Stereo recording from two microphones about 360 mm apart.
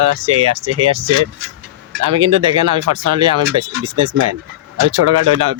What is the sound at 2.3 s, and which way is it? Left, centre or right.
Speech, right.